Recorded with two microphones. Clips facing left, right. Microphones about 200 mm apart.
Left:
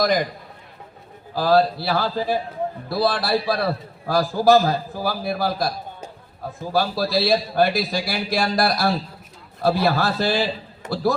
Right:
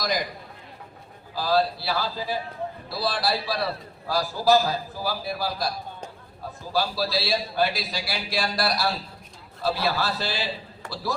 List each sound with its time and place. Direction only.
0.0 s a man's voice: 55° left (ahead or behind)
1.4 s a man's voice: 55° left (ahead or behind)
6.7 s a man's voice: 50° left (ahead or behind)
10.8 s a man's voice: 20° left (ahead or behind)